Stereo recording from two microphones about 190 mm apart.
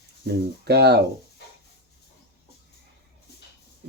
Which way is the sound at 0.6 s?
55° right (ahead or behind).